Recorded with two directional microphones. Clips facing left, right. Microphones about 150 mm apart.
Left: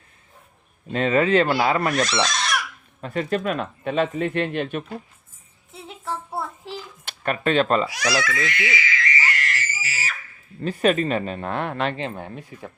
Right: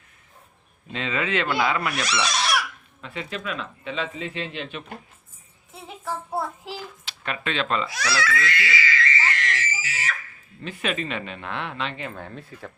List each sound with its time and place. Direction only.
0.9 s speech: 45° left (ahead or behind)
2.2 s a sound: 10° right (ahead or behind)
3.0 s speech: 45° left (ahead or behind)
7.0 s speech: 50° left (ahead or behind)
7.9 s speech: 15° left (ahead or behind)
8.2 s a sound: 20° left (ahead or behind); by 10.2 s 5° left (ahead or behind)
10.6 s speech: 40° left (ahead or behind)
11.9 s speech: 25° left (ahead or behind)